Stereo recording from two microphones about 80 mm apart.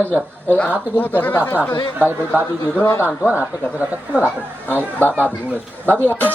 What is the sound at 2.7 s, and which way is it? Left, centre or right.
Speech, left.